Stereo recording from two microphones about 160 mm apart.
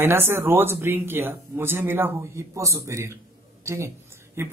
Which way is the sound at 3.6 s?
15° right (ahead or behind).